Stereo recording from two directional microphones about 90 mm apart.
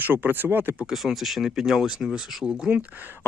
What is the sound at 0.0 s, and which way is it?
Speech, 20° right (ahead or behind).